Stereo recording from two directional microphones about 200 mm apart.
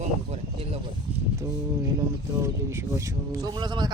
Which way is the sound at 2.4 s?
15° right (ahead or behind).